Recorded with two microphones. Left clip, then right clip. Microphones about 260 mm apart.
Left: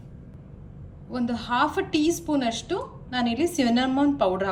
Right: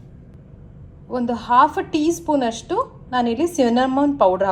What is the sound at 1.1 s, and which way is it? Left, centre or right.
A woman's voice, centre.